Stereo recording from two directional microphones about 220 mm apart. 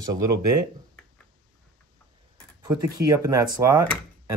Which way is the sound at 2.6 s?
15° right (ahead or behind).